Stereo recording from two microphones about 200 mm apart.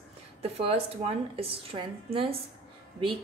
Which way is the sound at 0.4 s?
30° right (ahead or behind).